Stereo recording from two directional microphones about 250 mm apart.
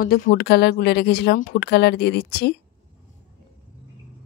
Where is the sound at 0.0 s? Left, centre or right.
Left.